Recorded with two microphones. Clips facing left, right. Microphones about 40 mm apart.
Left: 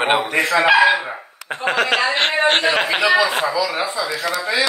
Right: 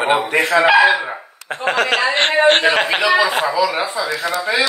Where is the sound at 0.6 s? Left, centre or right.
Centre.